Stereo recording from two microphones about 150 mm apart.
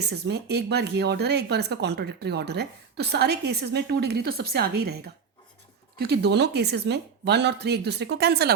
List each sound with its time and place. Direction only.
0.0 s speech: 90° right